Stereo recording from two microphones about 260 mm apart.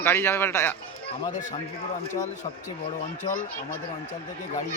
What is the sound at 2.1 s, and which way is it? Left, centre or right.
Speech, left.